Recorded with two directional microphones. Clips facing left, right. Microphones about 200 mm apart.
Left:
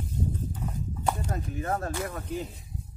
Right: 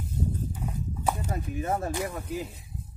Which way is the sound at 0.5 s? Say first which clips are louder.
Even; 5° right (ahead or behind).